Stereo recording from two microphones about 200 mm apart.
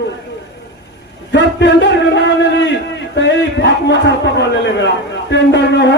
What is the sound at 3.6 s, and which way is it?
A man's voice, 60° left (ahead or behind).